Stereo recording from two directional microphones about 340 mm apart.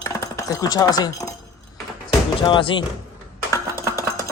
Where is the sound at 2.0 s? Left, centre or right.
Centre.